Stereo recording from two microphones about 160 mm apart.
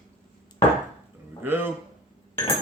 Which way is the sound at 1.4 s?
15° right (ahead or behind).